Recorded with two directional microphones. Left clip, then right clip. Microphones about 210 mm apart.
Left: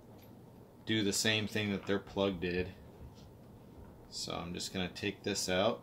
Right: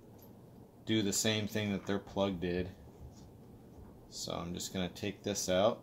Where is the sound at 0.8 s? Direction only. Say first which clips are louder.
Left 1 dB; 25° right (ahead or behind).